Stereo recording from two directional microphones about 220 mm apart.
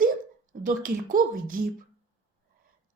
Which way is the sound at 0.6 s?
40° right (ahead or behind).